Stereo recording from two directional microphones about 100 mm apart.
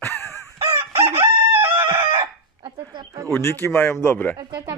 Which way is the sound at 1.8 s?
25° right (ahead or behind).